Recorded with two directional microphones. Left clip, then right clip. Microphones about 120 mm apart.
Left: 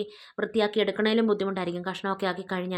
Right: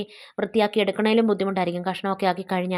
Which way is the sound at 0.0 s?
25° right (ahead or behind).